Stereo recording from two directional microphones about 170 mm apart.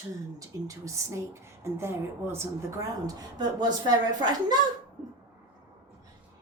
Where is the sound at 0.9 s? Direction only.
15° right (ahead or behind).